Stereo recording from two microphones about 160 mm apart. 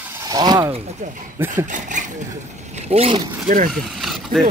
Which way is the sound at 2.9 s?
40° right (ahead or behind).